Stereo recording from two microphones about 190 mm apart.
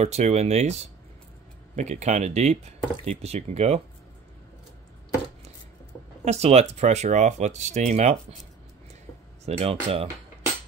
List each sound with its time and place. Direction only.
0.0 s speech: 35° right (ahead or behind)
1.8 s speech: 35° right (ahead or behind)
6.2 s speech: 35° right (ahead or behind)
9.5 s speech: 30° right (ahead or behind)